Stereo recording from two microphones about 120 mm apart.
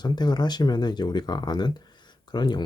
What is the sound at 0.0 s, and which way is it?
Speech, 35° left (ahead or behind).